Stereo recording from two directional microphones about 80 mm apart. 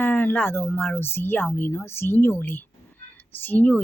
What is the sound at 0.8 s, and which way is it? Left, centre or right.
Speech, left.